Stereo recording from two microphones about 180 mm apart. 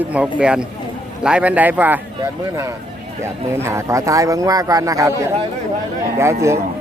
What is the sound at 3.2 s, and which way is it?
Speech, 15° right (ahead or behind).